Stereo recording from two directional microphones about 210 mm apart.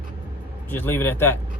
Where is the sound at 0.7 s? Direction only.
10° left (ahead or behind).